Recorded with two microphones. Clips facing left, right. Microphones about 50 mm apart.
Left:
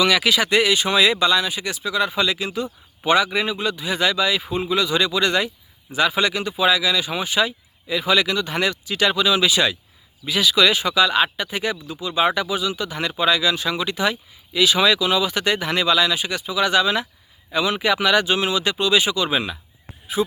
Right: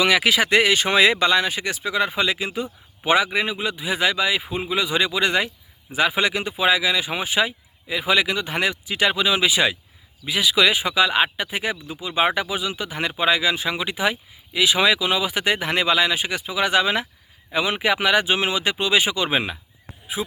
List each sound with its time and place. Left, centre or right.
0.0 s speech: right
10.2 s speech: centre; by 19.5 s right
20.2 s speech: centre